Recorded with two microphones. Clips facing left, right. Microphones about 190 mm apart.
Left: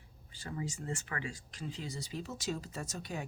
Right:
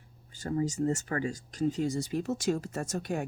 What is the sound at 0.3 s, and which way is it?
Speech, 45° right (ahead or behind).